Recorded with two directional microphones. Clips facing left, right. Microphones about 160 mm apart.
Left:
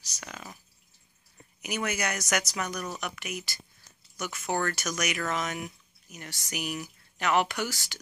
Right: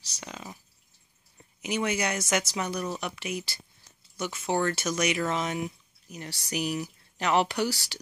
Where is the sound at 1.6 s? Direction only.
25° right (ahead or behind).